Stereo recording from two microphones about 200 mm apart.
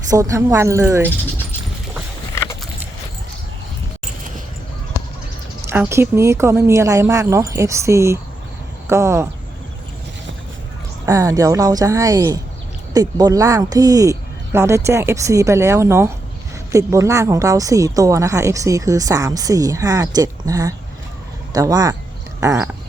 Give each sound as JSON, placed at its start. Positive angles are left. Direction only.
{"t": 0.1, "sound": "a woman's voice", "side_deg": -15}
{"t": 2.3, "sound": "a sound", "side_deg": 15}
{"t": 5.6, "sound": "a woman's voice", "side_deg": -10}
{"t": 11.0, "sound": "a woman's voice", "side_deg": -15}